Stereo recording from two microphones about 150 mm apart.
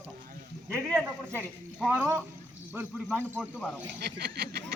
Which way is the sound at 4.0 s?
90° right.